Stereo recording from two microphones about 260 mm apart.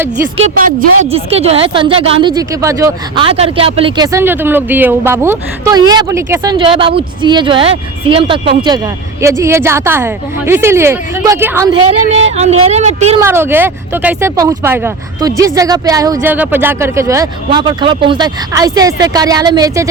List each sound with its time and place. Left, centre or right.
0.3 s speech: right
13.2 s speech: centre